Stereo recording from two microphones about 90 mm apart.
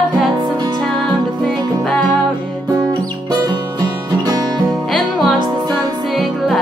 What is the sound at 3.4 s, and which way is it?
Music, 45° right (ahead or behind).